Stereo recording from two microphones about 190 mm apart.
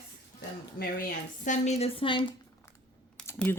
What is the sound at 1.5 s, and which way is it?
Speech, 35° left (ahead or behind).